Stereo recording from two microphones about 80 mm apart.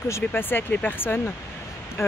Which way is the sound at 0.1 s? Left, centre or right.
Left.